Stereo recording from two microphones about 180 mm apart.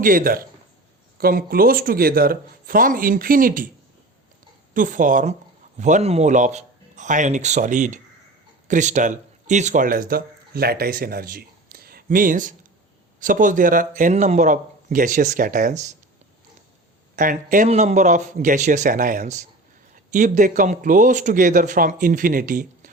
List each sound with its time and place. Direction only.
0.0 s speech: 50° right (ahead or behind)
4.7 s a man's voice: 45° right (ahead or behind)
17.2 s speech: 50° right (ahead or behind)